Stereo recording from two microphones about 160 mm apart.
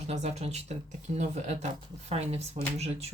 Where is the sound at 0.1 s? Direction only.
45° right (ahead or behind).